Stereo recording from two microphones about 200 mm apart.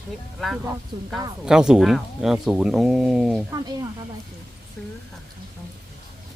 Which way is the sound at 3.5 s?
20° right (ahead or behind).